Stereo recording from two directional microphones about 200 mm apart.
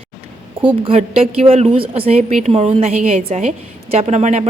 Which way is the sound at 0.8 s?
30° right (ahead or behind).